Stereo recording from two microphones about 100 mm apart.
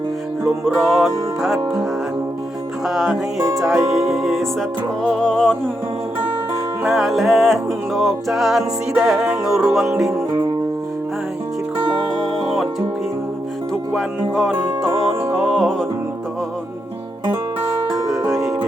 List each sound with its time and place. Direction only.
0.6 s music: centre (ahead or behind)
2.8 s music: 5° right (ahead or behind)
3.3 s music: 35° right (ahead or behind)
3.6 s music: centre (ahead or behind)
6.8 s music: centre (ahead or behind)
12.4 s music: centre (ahead or behind)
13.9 s music: centre (ahead or behind)
18.3 s music: 30° right (ahead or behind)